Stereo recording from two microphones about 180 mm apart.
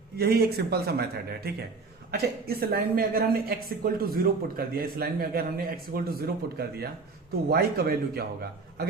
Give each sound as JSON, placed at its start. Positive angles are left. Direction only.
{"t": 0.2, "sound": "speech", "side_deg": -60}